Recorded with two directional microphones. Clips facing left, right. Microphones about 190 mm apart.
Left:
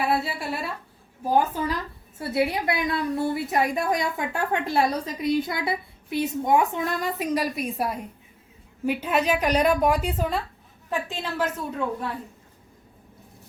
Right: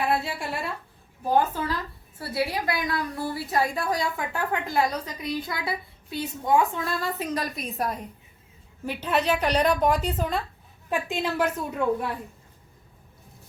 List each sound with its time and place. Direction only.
0.1 s a woman's voice: centre (ahead or behind)
10.8 s a woman's voice: 15° right (ahead or behind)